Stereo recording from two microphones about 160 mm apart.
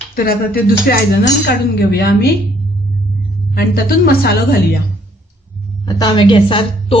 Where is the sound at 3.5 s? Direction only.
75° left (ahead or behind).